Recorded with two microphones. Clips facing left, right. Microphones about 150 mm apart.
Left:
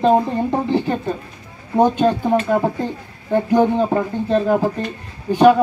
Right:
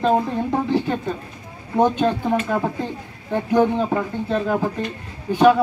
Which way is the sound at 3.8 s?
25° left (ahead or behind).